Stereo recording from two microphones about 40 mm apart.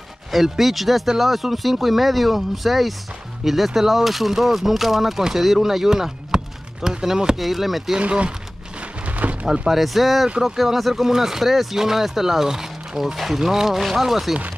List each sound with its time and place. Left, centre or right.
0.3 s speech: centre
7.3 s speech: centre
8.0 s speech: right
9.0 s a sound: right
9.5 s speech: centre